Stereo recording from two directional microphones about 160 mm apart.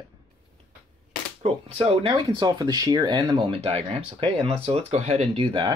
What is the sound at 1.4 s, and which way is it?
Speech, 40° right (ahead or behind).